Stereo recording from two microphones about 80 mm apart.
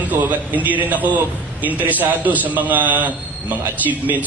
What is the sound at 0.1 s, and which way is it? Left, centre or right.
A man's voice, right.